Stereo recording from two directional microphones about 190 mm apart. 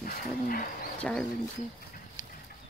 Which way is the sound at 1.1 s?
5° left (ahead or behind).